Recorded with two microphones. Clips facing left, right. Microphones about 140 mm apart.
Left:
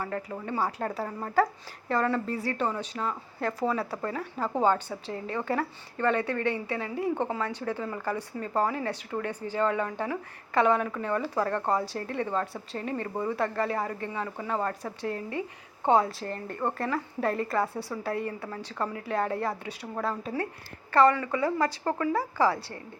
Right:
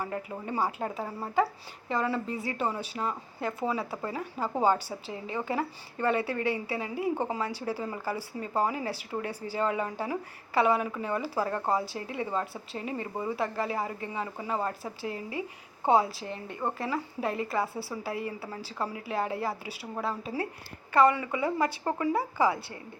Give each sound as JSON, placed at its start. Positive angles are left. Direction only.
{"t": 0.3, "sound": "a woman's voice", "side_deg": -15}
{"t": 3.0, "sound": "a woman's voice", "side_deg": -20}
{"t": 3.4, "sound": "a woman's voice", "side_deg": -5}
{"t": 4.0, "sound": "a woman's voice", "side_deg": -15}
{"t": 15.9, "sound": "a woman's voice", "side_deg": -5}
{"t": 21.1, "sound": "a woman's voice", "side_deg": -20}